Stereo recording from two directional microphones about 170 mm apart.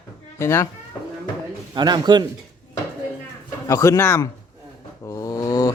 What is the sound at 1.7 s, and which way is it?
Speech, 25° right (ahead or behind).